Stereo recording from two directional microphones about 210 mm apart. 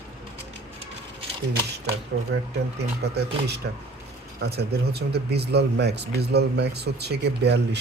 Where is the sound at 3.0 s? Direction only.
50° right (ahead or behind).